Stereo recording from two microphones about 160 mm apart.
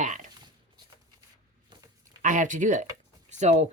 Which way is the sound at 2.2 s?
55° right (ahead or behind).